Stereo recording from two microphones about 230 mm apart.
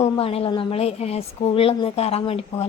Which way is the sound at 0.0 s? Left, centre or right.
Left.